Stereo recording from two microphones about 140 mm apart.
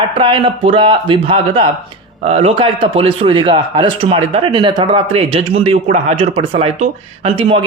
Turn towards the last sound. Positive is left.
turn(degrees=-40)  # may be behind; listen again after turning